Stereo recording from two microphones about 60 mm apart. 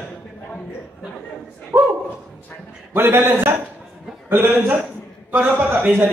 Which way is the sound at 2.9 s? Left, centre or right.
Right.